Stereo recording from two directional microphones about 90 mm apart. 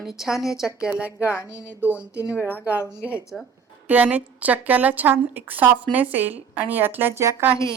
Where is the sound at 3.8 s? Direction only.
20° right (ahead or behind).